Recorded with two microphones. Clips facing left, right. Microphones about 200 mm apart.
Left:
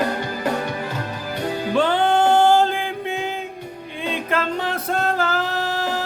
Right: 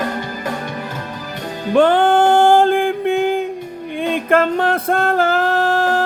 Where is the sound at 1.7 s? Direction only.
55° right (ahead or behind).